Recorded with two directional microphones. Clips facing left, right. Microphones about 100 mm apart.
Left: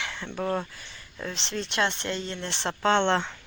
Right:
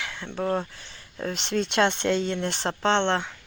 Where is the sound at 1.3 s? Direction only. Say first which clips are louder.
Right 6 dB; 10° right (ahead or behind).